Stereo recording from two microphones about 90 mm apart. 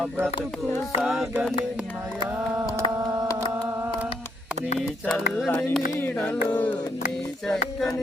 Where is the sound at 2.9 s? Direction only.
35° right (ahead or behind).